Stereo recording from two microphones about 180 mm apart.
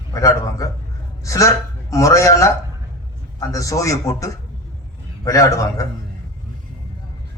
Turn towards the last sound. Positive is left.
turn(degrees=20)  # may be behind; listen again after turning